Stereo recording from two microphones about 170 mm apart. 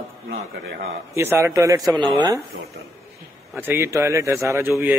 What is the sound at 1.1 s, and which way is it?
A man's voice, 15° right (ahead or behind).